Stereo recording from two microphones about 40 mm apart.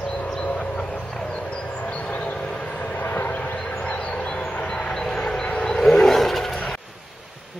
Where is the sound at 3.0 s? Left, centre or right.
Left.